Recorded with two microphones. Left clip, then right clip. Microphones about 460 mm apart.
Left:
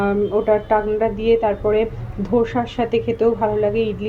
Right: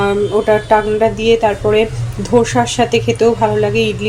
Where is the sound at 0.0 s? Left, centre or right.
Left.